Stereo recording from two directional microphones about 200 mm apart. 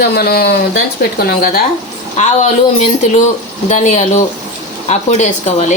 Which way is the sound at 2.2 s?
35° left (ahead or behind).